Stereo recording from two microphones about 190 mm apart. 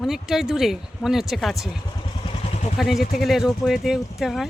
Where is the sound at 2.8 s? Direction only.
Centre (ahead or behind).